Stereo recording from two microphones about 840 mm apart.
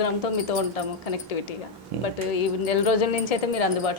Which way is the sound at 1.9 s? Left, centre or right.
Right.